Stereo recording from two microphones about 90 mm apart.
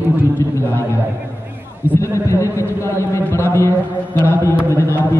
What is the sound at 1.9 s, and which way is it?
A man's voice, 35° left (ahead or behind).